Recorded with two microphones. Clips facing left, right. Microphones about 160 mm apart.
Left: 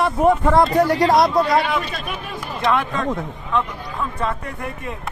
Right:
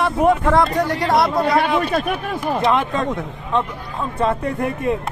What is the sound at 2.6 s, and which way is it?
Speech, 25° right (ahead or behind).